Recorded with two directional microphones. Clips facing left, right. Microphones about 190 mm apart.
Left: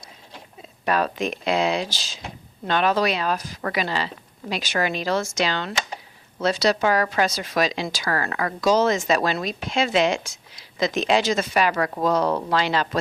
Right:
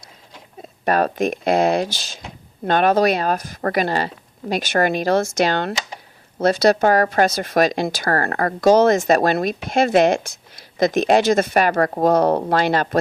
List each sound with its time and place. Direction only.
0.9 s speech: 50° right (ahead or behind)